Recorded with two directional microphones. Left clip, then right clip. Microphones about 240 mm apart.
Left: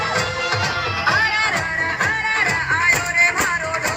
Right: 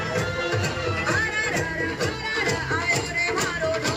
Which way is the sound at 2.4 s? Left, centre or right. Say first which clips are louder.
Left 7 dB; centre.